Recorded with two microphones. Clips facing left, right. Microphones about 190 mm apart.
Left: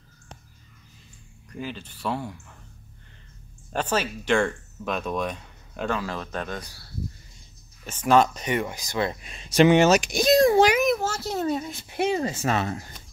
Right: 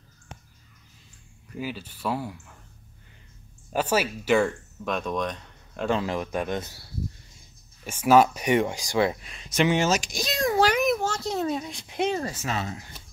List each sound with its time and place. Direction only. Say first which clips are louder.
1.5 s speech: right 1 dB; 5° right (ahead or behind)
3.7 s speech: right 2 dB; 10° right (ahead or behind); by 5.9 s 5° left (ahead or behind)
5.9 s speech: right 3 dB; 20° right (ahead or behind)
7.8 s speech: right 1 dB; 10° right (ahead or behind)
9.2 s speech: left 6 dB; 30° left (ahead or behind)
9.7 s speech: left 6 dB; 65° left (ahead or behind)
10.3 s a sound: left 8 dB; 30° left (ahead or behind)
10.8 s speech: left 1 dB; centre (ahead or behind)
12.2 s speech: left 4 dB; 25° left (ahead or behind)
12.4 s speech: left 5 dB; 60° left (ahead or behind)